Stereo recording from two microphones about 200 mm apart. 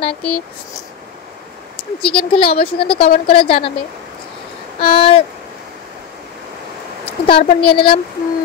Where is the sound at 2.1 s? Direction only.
25° left (ahead or behind).